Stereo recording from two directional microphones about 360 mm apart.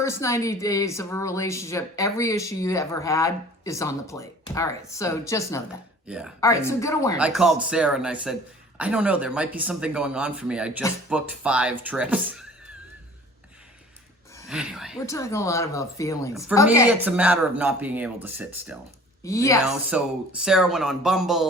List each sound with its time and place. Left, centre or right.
0.0 s speech: centre
6.1 s speech: centre
6.4 s speech: centre
7.2 s speech: centre
14.3 s speech: centre
16.8 s speech: centre
19.2 s speech: centre
19.6 s speech: centre